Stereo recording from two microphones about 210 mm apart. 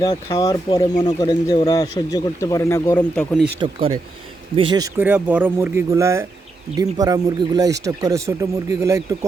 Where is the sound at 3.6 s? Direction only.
25° right (ahead or behind).